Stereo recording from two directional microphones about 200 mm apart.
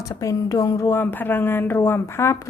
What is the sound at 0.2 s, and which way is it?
A woman's voice, 15° left (ahead or behind).